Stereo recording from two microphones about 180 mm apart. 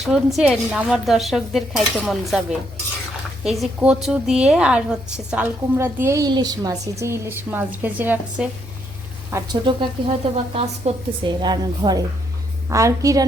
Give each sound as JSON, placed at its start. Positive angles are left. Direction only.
{"t": 0.0, "sound": "a woman's voice", "side_deg": 0}
{"t": 9.3, "sound": "a woman's voice", "side_deg": -25}